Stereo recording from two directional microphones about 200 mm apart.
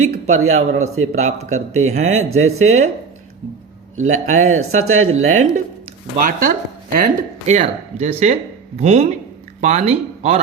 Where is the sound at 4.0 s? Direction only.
35° right (ahead or behind).